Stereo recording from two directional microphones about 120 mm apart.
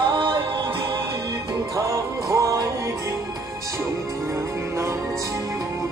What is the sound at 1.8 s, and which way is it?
Music, 25° right (ahead or behind).